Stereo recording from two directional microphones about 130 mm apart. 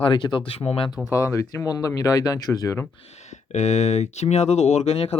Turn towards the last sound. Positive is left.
turn(degrees=55)  # may be behind; listen again after turning